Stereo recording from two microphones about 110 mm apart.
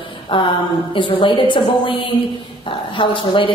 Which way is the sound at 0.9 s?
50° left (ahead or behind).